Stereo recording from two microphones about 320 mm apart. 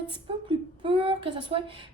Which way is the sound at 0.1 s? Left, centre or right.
Centre.